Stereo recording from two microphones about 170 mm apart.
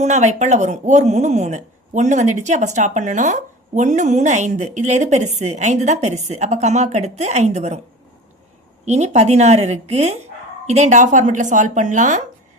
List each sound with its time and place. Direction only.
0.0 s speech: 45° right (ahead or behind)
8.8 s a woman's voice: 40° right (ahead or behind)